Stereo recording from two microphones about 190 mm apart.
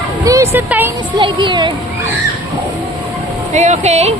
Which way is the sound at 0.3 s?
15° right (ahead or behind).